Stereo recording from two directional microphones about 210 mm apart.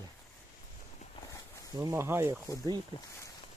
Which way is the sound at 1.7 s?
15° right (ahead or behind).